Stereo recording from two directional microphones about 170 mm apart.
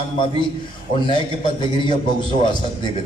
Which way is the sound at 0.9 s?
30° left (ahead or behind).